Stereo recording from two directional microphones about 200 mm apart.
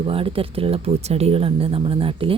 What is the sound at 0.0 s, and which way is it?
Speech, 25° right (ahead or behind).